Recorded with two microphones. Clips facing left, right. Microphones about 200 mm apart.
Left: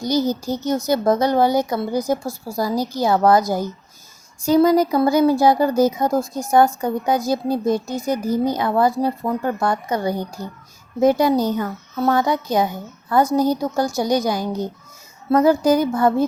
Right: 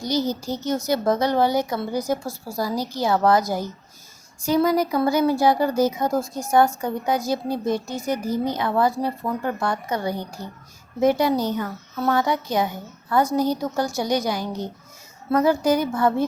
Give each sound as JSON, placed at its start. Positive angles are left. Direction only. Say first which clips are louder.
{"t": 0.0, "sound": "speech", "louder": "left 4 dB", "side_deg": 45}
{"t": 2.0, "sound": "a woman's voice", "louder": "left 3 dB", "side_deg": 15}
{"t": 2.6, "sound": "speech", "louder": "left 4 dB", "side_deg": 45}
{"t": 4.5, "sound": "a woman's voice", "louder": "left 5 dB", "side_deg": 40}